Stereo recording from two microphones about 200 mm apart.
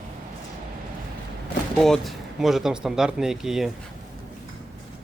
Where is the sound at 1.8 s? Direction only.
Centre (ahead or behind).